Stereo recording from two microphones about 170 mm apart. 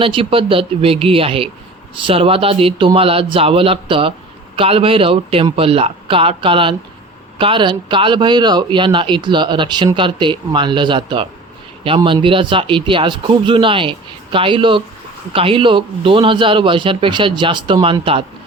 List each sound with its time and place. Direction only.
0.0 s a man's voice: 30° right (ahead or behind)